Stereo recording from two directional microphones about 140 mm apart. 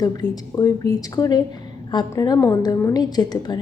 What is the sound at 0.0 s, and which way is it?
A woman's voice, 25° left (ahead or behind).